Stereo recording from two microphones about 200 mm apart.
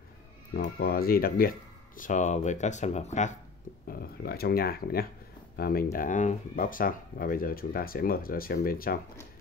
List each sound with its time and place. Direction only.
0.6 s speech: 50° left (ahead or behind)
3.8 s speech: 50° left (ahead or behind)